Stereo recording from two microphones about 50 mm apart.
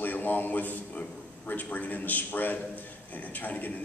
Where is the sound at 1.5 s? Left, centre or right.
Left.